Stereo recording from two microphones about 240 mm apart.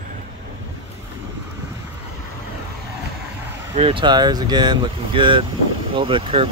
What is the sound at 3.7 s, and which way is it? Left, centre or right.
Speech, right.